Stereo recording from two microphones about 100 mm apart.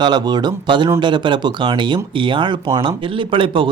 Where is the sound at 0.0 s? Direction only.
45° right (ahead or behind).